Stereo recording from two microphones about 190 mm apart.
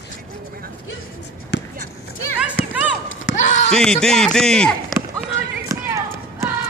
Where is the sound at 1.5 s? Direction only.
65° left (ahead or behind).